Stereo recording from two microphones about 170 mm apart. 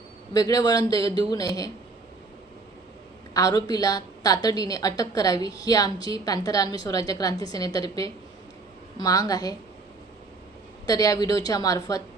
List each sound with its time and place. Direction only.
0.3 s a woman's voice: 20° left (ahead or behind)
3.3 s a woman's voice: 20° left (ahead or behind)
10.8 s a woman's voice: 20° left (ahead or behind)